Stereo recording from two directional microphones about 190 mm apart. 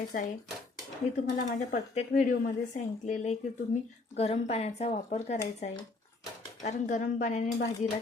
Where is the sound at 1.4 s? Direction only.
45° left (ahead or behind).